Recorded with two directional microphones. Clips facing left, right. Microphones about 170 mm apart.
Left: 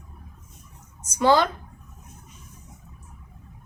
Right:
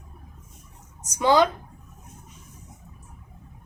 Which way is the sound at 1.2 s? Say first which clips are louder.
Even; 15° right (ahead or behind).